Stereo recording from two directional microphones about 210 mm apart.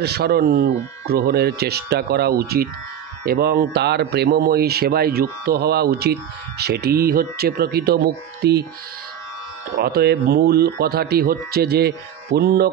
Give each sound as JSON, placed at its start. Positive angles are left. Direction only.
{"t": 0.0, "sound": "speech", "side_deg": -50}
{"t": 9.8, "sound": "speech", "side_deg": -50}